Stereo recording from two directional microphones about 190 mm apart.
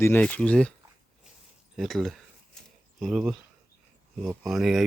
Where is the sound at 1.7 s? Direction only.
Centre (ahead or behind).